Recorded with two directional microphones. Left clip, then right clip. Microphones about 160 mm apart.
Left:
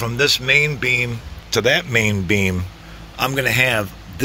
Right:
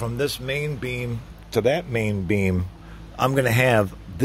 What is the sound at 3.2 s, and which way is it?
Speech, 35° right (ahead or behind).